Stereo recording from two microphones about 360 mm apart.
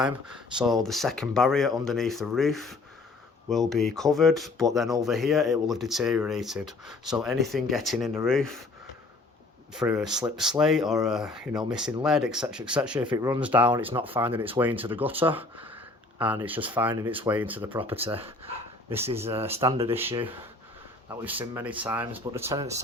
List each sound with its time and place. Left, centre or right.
0.0 s speech: centre
9.7 s speech: centre